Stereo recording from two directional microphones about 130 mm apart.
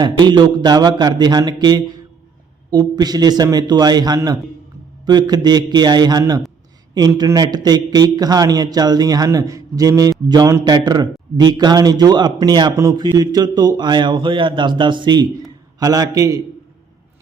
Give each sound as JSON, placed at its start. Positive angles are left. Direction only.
{"t": 0.0, "sound": "a man's voice", "side_deg": -35}